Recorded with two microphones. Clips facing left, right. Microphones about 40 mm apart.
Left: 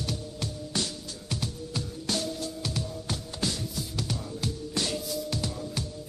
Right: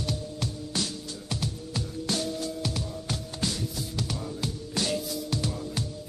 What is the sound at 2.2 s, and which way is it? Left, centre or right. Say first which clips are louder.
Music: right 2 dB; centre.